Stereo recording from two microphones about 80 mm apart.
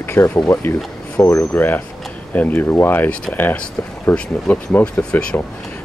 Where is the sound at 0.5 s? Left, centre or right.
Left.